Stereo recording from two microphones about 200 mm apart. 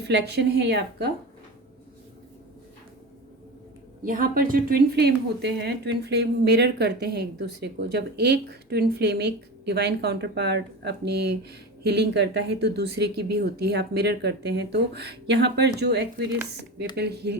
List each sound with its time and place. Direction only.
0.0 s a woman's voice: 55° right (ahead or behind)
4.0 s a woman's voice: 45° right (ahead or behind)